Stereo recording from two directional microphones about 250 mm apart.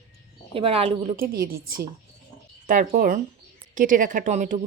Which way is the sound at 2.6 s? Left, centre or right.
Right.